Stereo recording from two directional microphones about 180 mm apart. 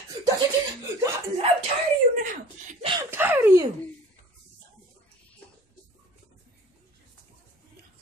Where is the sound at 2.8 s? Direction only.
25° right (ahead or behind).